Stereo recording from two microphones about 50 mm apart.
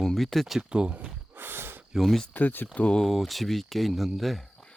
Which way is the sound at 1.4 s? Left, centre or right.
Right.